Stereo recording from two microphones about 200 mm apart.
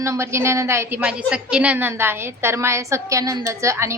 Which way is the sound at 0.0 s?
15° right (ahead or behind).